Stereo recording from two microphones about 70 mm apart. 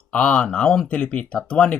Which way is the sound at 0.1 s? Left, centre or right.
Centre.